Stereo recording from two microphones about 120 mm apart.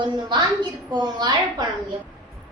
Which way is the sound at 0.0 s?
40° right (ahead or behind).